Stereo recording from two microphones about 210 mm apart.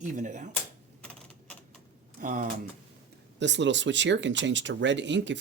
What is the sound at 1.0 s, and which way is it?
Typing, 5° left (ahead or behind).